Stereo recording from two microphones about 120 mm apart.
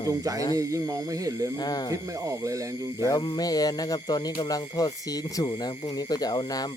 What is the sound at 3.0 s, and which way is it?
Speech, 35° left (ahead or behind).